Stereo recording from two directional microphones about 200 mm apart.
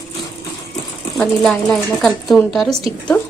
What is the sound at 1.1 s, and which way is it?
A woman's voice, centre (ahead or behind).